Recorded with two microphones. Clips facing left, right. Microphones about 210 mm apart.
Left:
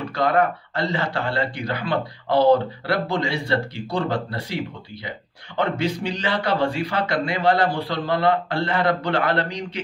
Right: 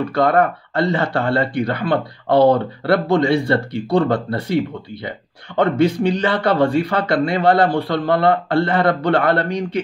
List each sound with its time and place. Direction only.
0.1 s speech: 55° right (ahead or behind)
5.6 s speech: 55° right (ahead or behind)